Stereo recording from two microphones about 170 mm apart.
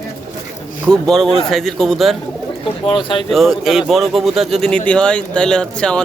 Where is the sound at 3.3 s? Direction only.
Centre (ahead or behind).